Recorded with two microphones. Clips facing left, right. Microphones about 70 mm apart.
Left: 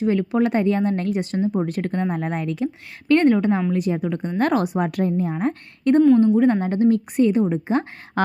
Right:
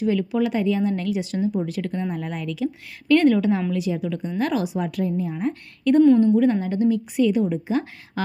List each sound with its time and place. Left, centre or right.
0.0 s a woman's voice: left